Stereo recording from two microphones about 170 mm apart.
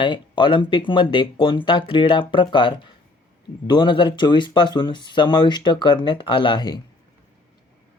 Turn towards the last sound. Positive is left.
turn(degrees=25)  # may be behind; listen again after turning